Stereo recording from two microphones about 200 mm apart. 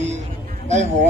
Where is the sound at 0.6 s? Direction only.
35° right (ahead or behind).